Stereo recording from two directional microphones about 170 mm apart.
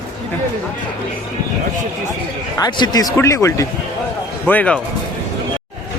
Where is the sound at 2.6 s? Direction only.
20° left (ahead or behind).